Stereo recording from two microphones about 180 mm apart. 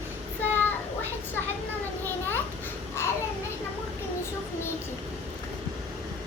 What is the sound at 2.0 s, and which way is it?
Children playing, 10° left (ahead or behind).